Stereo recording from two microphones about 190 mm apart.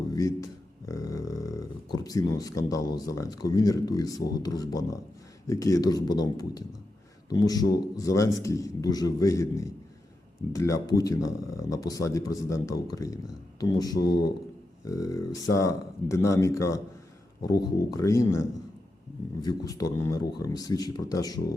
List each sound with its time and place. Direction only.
0.1 s speech: 20° left (ahead or behind)